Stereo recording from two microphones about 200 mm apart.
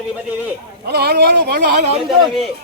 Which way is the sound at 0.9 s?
55° right (ahead or behind).